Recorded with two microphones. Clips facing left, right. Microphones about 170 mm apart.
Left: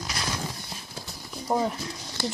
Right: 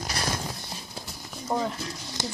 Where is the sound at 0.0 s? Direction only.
40° right (ahead or behind).